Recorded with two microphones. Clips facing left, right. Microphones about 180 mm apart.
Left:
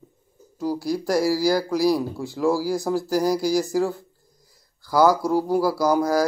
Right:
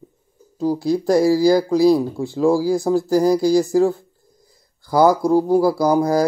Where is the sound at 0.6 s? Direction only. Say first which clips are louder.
Right 6 dB; 20° right (ahead or behind).